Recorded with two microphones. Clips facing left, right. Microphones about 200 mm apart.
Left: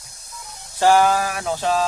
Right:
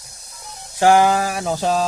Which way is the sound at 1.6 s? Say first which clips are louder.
Right 1 dB; centre (ahead or behind).